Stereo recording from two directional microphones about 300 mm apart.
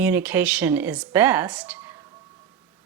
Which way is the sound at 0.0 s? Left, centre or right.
Centre.